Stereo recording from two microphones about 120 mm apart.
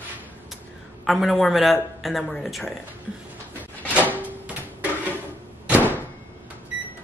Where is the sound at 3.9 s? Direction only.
15° right (ahead or behind).